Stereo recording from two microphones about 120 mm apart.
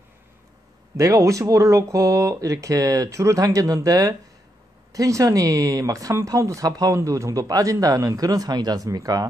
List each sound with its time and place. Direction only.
0.9 s speech: 30° right (ahead or behind)